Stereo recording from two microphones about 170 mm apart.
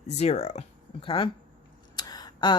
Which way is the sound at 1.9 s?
25° left (ahead or behind).